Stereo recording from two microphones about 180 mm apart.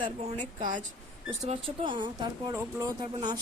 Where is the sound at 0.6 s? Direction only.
45° right (ahead or behind).